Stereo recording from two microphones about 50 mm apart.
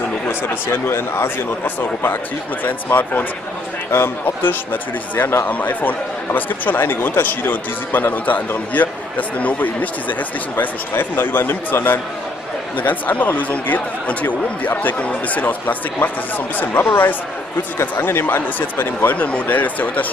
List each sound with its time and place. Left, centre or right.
0.3 s speech: left
1.6 s speech: left
3.9 s speech: left
5.5 s speech: left
17.9 s speech: left